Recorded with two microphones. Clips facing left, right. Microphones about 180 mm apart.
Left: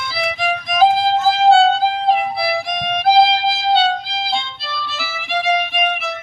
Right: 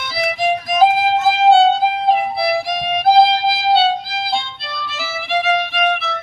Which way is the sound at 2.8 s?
5° right (ahead or behind).